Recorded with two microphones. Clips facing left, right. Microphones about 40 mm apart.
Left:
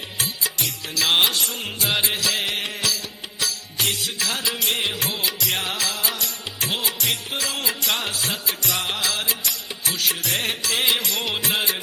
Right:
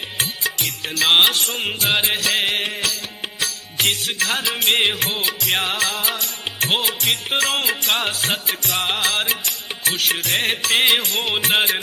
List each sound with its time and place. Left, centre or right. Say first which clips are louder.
0.2 s music: right 3 dB; right
2.6 s music: right 3 dB; right
3.4 s music: right 4 dB; right